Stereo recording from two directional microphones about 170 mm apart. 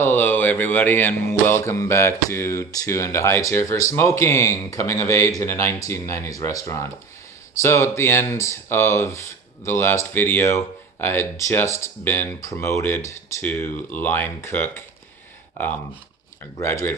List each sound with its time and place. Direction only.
0.0 s speech: 10° left (ahead or behind)
16.6 s speech: 15° left (ahead or behind)